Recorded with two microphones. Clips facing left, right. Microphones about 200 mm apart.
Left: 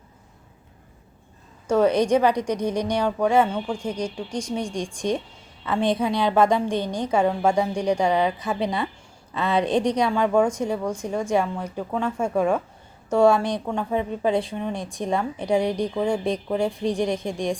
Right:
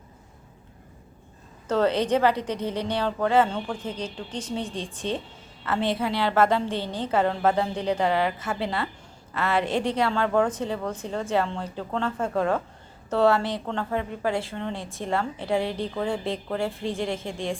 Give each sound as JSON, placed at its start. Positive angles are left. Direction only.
{"t": 1.6, "sound": "a woman's voice", "side_deg": 10}